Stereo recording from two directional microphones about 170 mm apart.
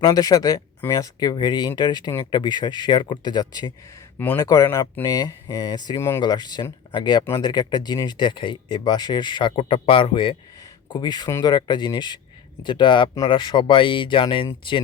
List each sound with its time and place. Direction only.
0.0 s speech: 20° left (ahead or behind)
4.2 s speech: 10° left (ahead or behind); by 14.8 s 30° left (ahead or behind)